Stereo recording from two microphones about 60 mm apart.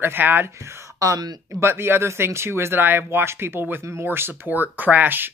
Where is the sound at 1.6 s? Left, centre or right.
Right.